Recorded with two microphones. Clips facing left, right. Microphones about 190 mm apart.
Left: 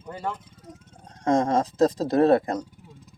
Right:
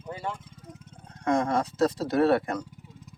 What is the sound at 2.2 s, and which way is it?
Speech, 35° left (ahead or behind).